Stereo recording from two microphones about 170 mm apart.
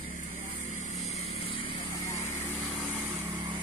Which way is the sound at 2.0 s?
15° left (ahead or behind).